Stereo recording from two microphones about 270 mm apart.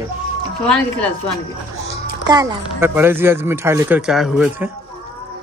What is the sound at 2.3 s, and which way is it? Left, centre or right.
Speech, centre.